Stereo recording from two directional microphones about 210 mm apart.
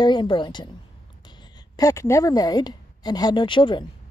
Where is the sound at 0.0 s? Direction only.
20° left (ahead or behind).